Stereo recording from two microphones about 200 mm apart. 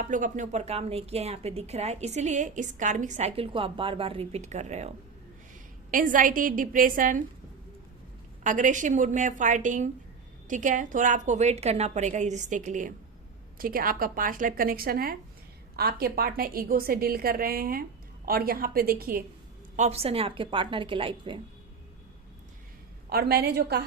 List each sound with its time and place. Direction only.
0.0 s speech: 40° right (ahead or behind)
5.9 s a woman's voice: 40° right (ahead or behind)
8.4 s a woman's voice: 40° right (ahead or behind)
19.7 s a woman's voice: 35° right (ahead or behind)
23.0 s a woman's voice: 50° right (ahead or behind)